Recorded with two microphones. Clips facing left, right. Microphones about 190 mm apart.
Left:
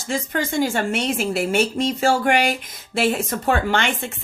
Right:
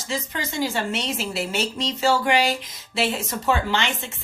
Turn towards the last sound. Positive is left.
turn(degrees=50)  # may be behind; listen again after turning